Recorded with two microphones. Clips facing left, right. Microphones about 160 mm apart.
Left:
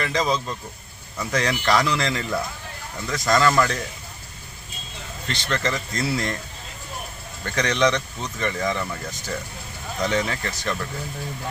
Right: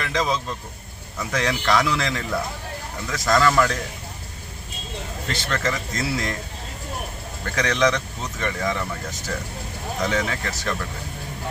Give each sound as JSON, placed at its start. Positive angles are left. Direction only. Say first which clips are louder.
{"t": 0.0, "sound": "speech", "louder": "left 1 dB", "side_deg": 0}
{"t": 5.3, "sound": "speech", "louder": "even", "side_deg": -5}
{"t": 7.5, "sound": "speech", "louder": "even", "side_deg": 0}
{"t": 10.0, "sound": "speech", "louder": "left 1 dB", "side_deg": 0}